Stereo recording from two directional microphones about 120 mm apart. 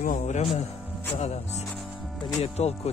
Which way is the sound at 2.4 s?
60° left (ahead or behind).